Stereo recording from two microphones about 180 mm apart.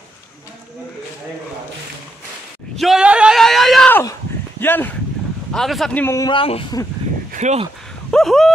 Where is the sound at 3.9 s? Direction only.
15° left (ahead or behind).